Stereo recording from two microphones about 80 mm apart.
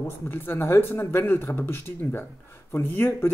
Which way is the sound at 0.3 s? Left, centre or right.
Left.